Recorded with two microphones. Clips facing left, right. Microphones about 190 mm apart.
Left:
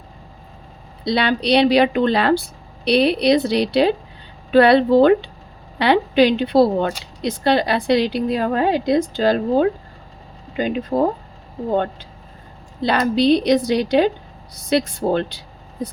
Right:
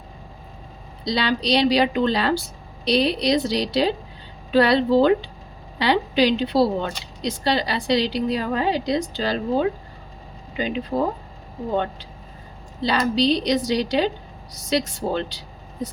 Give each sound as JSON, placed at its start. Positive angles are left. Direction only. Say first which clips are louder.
{"t": 1.0, "sound": "a woman's voice", "louder": "left 4 dB", "side_deg": 60}
{"t": 12.8, "sound": "a woman's voice", "louder": "left 3 dB", "side_deg": 55}